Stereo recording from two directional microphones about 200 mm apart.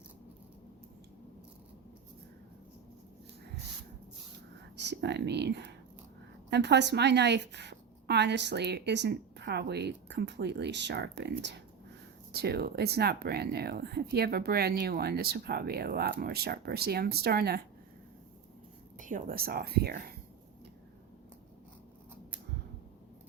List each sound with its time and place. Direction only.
4.8 s a woman's voice: 60° right (ahead or behind)
18.9 s speech: 40° right (ahead or behind)